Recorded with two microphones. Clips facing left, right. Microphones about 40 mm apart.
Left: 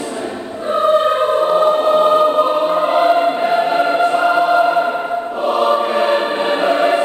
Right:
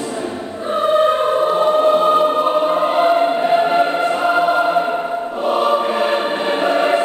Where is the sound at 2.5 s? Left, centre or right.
Centre.